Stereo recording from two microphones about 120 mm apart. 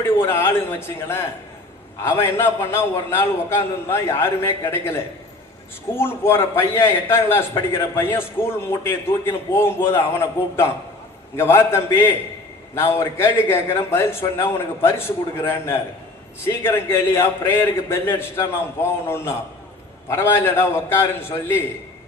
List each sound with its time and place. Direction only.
0.0 s a man's voice: 20° left (ahead or behind)